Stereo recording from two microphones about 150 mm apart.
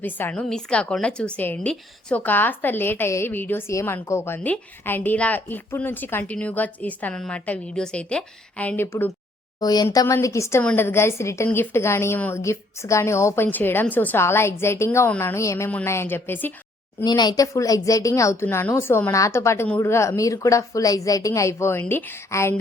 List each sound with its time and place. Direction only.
0.0 s a woman's voice: 10° left (ahead or behind)
9.6 s a woman's voice: 25° left (ahead or behind)
17.0 s a woman's voice: 25° left (ahead or behind)